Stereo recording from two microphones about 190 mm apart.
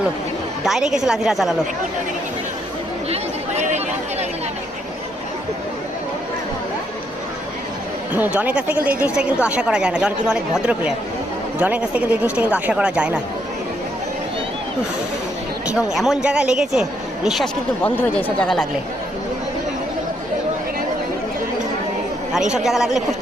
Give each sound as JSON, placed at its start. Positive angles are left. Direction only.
{"t": 0.6, "sound": "speech", "side_deg": 0}
{"t": 3.1, "sound": "chatter", "side_deg": -35}
{"t": 8.1, "sound": "speech", "side_deg": -10}
{"t": 15.6, "sound": "speech", "side_deg": -5}
{"t": 22.5, "sound": "speech", "side_deg": 0}